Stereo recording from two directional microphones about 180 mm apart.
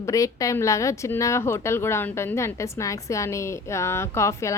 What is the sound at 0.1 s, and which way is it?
A woman's voice, 20° left (ahead or behind).